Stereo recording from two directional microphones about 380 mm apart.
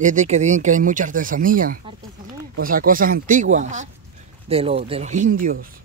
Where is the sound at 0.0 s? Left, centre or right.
Centre.